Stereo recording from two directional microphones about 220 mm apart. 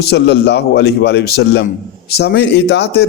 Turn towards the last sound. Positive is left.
turn(degrees=50)  # may be behind; listen again after turning